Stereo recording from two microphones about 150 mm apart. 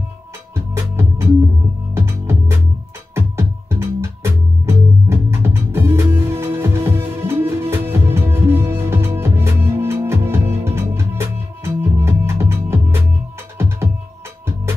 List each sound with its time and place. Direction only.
2.0 s music: 20° right (ahead or behind)